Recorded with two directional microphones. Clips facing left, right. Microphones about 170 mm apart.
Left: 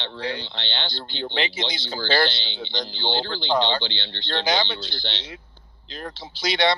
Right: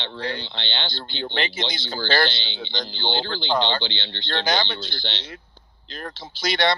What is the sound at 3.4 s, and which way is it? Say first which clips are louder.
Speech: left 1 dB; 20° right (ahead or behind).